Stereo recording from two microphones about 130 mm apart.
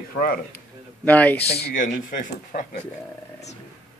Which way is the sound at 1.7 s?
90° left.